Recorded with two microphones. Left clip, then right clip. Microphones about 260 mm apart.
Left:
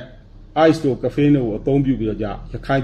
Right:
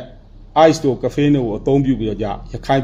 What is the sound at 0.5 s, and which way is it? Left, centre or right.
A man's voice, right.